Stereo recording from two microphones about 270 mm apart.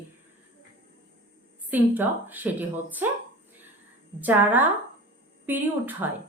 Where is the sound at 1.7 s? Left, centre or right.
Centre.